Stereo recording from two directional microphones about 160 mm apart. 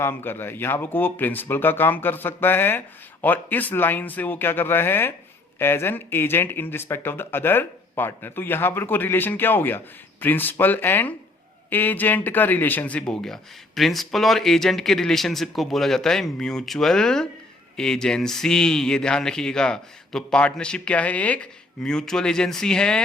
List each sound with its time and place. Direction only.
0.0 s speech: 15° left (ahead or behind)